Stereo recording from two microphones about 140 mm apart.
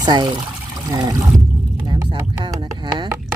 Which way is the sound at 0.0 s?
30° right (ahead or behind).